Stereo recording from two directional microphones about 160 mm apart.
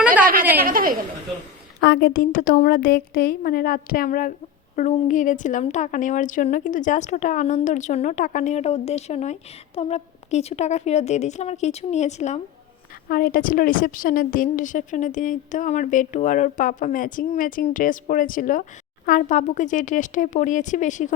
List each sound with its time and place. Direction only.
0.6 s a woman's voice: 65° right (ahead or behind)
1.8 s a woman's voice: 85° left; by 12.4 s 45° left (ahead or behind)
13.1 s a woman's voice: 65° left (ahead or behind)